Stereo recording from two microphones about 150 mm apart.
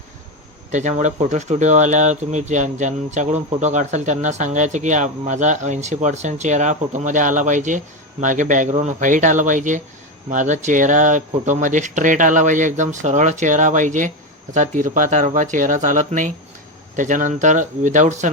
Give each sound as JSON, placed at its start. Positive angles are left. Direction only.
{"t": 0.7, "sound": "speech", "side_deg": -55}